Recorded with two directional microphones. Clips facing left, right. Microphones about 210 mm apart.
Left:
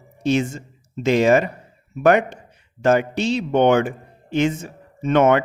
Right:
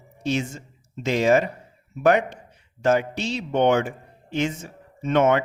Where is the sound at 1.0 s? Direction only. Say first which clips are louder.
Left 4 dB; 60° left (ahead or behind).